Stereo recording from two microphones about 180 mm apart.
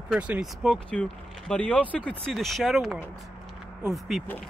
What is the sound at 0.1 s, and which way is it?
Speech, 5° right (ahead or behind).